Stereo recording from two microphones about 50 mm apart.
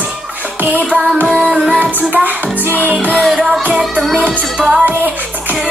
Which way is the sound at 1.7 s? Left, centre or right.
Right.